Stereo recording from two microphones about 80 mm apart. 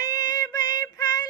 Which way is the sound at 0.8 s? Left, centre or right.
Left.